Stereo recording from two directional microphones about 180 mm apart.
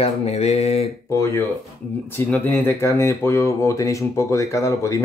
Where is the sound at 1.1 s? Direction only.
15° left (ahead or behind).